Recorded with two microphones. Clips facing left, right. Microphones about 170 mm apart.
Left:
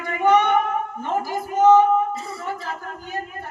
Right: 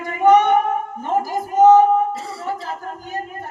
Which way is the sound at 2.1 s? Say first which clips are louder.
Right 1 dB; 85° right.